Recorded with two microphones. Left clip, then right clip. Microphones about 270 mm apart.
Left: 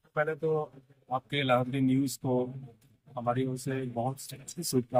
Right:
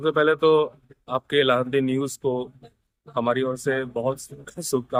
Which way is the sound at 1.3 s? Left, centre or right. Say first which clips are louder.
Right 9 dB; right.